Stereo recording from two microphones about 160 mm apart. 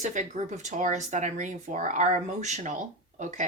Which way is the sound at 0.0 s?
50° right (ahead or behind).